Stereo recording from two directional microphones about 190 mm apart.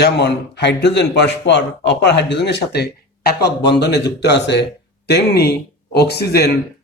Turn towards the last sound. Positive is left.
turn(degrees=55)  # may be behind; listen again after turning